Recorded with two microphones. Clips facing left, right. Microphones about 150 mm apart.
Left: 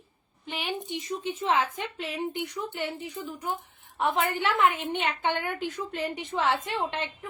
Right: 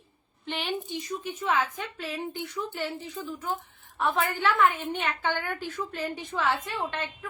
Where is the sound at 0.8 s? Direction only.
25° left (ahead or behind).